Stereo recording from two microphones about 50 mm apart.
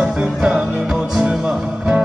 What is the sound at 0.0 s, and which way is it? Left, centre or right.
Music, centre.